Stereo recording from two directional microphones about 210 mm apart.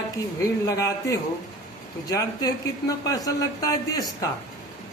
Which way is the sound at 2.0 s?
20° left (ahead or behind).